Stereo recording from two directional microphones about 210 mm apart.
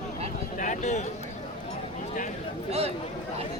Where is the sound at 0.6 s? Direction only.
35° left (ahead or behind).